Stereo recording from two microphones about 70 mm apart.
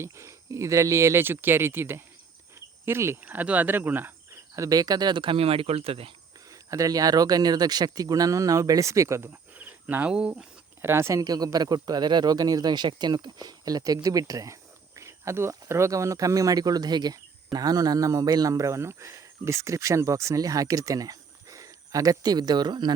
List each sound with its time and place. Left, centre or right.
0.0 s speech: right
3.2 s speech: right
4.5 s a man's voice: right
6.5 s a man's voice: right
10.1 s speech: centre
10.8 s speech: right
11.2 s a man's voice: right